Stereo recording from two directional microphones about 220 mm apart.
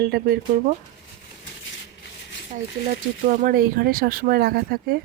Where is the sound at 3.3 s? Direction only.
40° right (ahead or behind).